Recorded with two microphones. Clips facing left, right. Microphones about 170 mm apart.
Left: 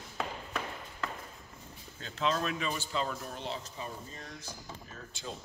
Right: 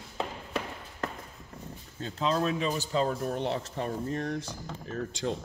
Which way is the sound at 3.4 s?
65° right (ahead or behind).